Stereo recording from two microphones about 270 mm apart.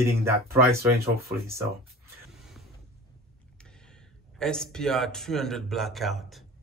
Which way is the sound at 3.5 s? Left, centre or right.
Centre.